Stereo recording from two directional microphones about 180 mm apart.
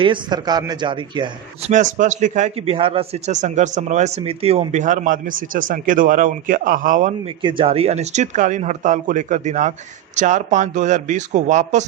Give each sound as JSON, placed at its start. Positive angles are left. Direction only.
{"t": 0.0, "sound": "a man's voice", "side_deg": -25}
{"t": 1.7, "sound": "a man's voice", "side_deg": -45}
{"t": 7.4, "sound": "a man's voice", "side_deg": -30}